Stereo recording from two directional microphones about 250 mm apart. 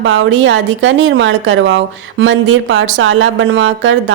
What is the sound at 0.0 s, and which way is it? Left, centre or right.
A woman's voice, right.